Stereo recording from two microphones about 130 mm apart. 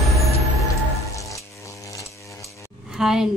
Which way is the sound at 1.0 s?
25° left (ahead or behind).